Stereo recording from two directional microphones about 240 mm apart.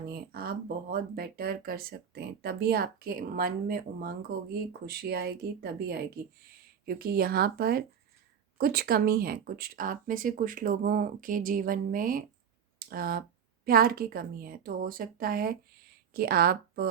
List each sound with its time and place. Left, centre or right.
0.1 s speech: right